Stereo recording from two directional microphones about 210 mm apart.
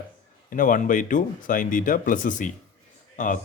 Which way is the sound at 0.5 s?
40° left (ahead or behind).